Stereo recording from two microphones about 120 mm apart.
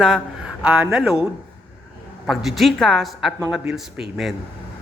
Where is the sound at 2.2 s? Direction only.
Centre (ahead or behind).